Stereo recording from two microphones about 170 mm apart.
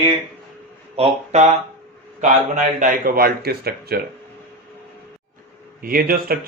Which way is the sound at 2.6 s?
50° right (ahead or behind).